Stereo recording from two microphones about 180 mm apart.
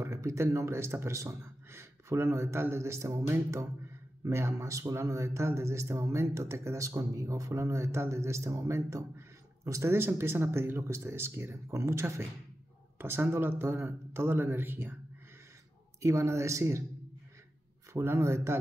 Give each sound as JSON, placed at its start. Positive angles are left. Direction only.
{"t": 0.0, "sound": "speech", "side_deg": -15}
{"t": 16.0, "sound": "speech", "side_deg": -15}
{"t": 17.9, "sound": "speech", "side_deg": -15}